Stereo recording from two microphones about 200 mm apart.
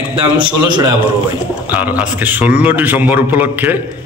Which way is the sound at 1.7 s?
10° right (ahead or behind).